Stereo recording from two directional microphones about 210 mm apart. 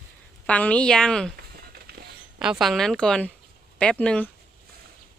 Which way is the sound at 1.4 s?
45° right (ahead or behind).